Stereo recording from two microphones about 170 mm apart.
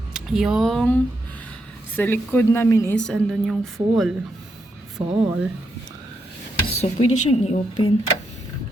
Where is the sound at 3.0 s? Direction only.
Centre (ahead or behind).